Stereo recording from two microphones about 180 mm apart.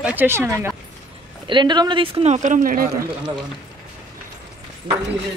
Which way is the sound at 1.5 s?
25° right (ahead or behind).